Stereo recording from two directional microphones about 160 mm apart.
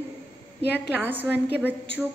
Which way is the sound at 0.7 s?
10° right (ahead or behind).